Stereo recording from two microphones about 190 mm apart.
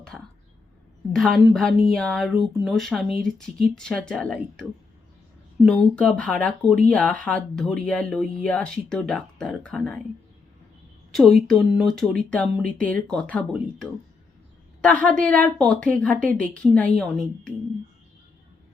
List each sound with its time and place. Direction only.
0.1 s a sound: 5° right (ahead or behind)
1.1 s speech: 5° left (ahead or behind)
5.6 s speech: 5° left (ahead or behind)
11.1 s a woman's voice: centre (ahead or behind)